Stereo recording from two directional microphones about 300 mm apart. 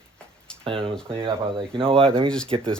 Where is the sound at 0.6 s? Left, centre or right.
Centre.